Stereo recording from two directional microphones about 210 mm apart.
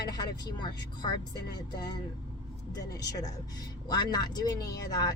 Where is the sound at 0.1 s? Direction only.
20° left (ahead or behind).